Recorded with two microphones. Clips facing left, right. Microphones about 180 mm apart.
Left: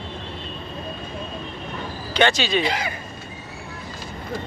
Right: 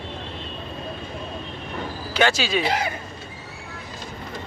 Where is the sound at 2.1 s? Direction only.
5° right (ahead or behind).